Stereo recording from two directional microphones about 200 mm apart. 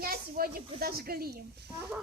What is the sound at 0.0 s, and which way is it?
Speech, 50° right (ahead or behind).